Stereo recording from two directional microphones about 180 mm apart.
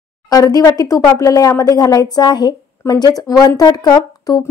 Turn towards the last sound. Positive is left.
turn(degrees=20)  # may be behind; listen again after turning